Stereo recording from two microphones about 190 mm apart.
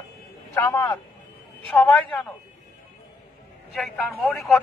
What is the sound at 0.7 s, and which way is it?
A man's voice, 15° left (ahead or behind).